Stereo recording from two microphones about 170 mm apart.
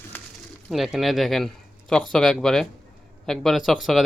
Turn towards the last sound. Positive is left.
turn(degrees=0)  # may be behind; listen again after turning